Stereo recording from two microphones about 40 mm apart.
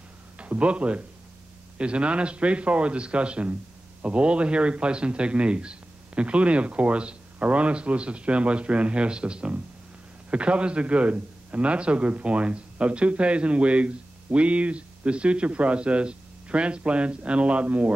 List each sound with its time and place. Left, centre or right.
0.4 s a man's voice: right